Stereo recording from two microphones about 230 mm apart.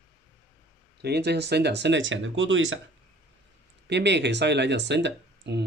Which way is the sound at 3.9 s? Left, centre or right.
Right.